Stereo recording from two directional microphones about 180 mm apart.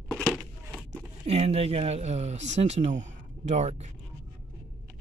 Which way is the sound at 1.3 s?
35° right (ahead or behind).